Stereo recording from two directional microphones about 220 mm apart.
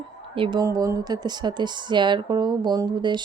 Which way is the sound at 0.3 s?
20° right (ahead or behind).